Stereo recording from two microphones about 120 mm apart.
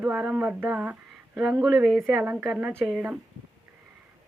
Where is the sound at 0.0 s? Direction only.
15° right (ahead or behind).